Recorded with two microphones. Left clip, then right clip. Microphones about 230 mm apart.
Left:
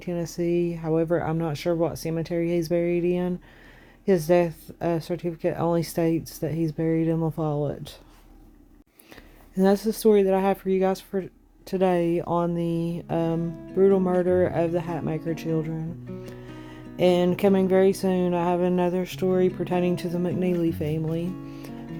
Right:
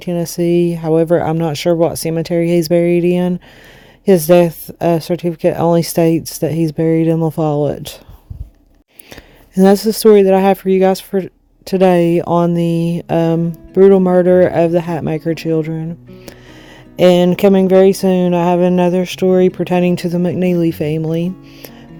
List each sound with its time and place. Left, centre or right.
0.0 s speech: right
9.6 s speech: right